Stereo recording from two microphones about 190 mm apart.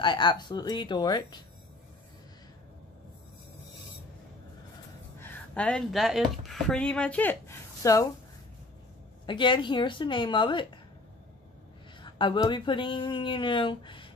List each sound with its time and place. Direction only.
0.0 s speech: 25° left (ahead or behind)
5.2 s speech: 10° left (ahead or behind)
9.2 s speech: 25° left (ahead or behind)
12.0 s speech: 25° left (ahead or behind)